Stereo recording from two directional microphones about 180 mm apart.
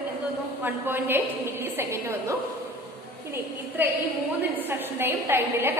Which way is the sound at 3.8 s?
10° right (ahead or behind).